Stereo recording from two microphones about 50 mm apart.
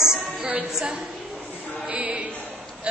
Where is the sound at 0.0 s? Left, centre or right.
Centre.